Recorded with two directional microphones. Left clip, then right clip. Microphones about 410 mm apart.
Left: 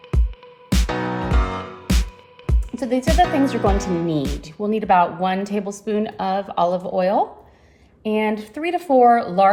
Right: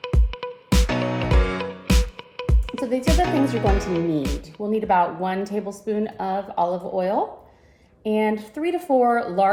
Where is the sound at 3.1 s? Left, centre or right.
Centre.